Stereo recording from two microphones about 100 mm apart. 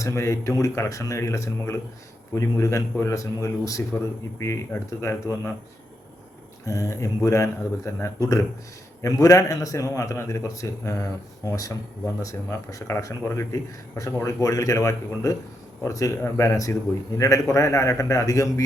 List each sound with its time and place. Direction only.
0.0 s speech: 30° left (ahead or behind)
6.7 s speech: 35° left (ahead or behind)